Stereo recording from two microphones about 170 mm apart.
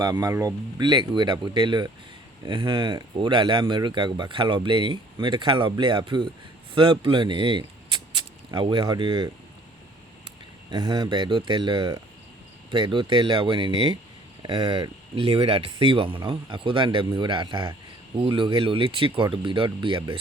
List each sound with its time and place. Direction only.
0.0 s speech: 20° right (ahead or behind)
10.7 s speech: 25° right (ahead or behind)